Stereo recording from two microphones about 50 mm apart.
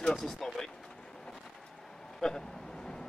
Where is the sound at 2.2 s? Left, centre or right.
Centre.